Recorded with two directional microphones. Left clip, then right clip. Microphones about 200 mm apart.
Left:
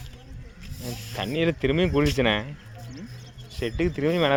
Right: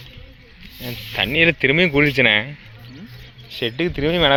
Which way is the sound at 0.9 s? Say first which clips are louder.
Right 9 dB; 15° right (ahead or behind).